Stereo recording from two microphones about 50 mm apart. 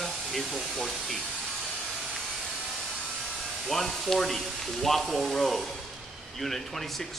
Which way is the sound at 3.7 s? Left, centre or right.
Centre.